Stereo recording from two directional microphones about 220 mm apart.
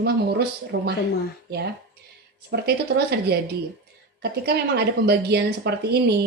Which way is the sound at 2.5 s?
50° right (ahead or behind).